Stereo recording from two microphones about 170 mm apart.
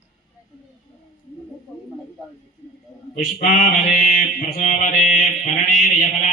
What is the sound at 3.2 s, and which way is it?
Mantra, 45° left (ahead or behind).